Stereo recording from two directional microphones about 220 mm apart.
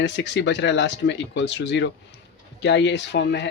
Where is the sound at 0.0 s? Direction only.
50° left (ahead or behind).